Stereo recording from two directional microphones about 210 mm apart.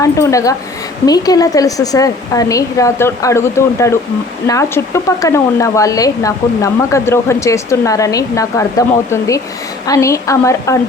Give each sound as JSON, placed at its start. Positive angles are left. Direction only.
{"t": 0.0, "sound": "speech", "side_deg": 15}